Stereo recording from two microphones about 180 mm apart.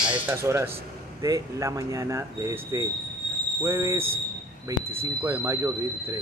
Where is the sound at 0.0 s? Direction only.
5° right (ahead or behind).